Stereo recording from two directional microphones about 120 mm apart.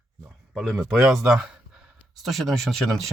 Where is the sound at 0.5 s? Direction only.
Centre (ahead or behind).